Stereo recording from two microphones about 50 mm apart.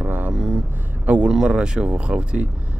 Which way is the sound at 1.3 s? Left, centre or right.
Centre.